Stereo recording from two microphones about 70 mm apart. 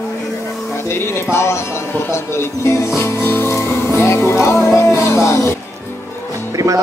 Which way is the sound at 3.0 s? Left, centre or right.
Left.